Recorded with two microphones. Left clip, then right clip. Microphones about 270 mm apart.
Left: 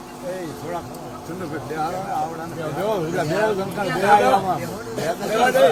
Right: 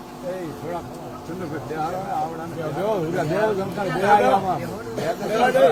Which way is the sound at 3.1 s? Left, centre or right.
Centre.